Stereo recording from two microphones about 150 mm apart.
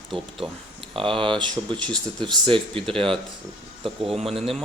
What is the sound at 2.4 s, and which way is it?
Speech, 35° right (ahead or behind).